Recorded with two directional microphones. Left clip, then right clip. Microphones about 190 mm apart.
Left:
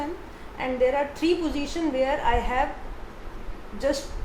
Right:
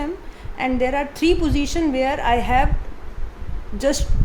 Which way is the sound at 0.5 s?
60° right (ahead or behind).